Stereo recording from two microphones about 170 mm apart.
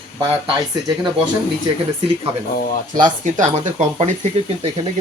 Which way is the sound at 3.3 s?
45° right (ahead or behind).